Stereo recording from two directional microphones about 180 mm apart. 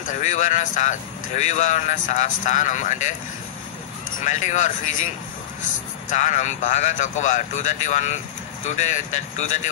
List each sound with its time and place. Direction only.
0.1 s speech: 40° left (ahead or behind)
4.2 s speech: 40° left (ahead or behind)